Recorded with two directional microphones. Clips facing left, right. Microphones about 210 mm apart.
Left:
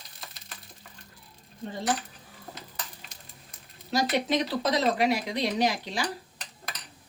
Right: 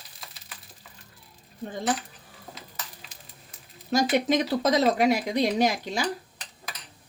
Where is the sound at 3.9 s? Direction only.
45° right (ahead or behind).